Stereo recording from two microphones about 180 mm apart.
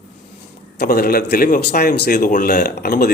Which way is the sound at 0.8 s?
55° left (ahead or behind).